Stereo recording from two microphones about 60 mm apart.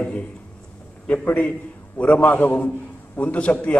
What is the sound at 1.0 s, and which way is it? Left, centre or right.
A man's voice, left.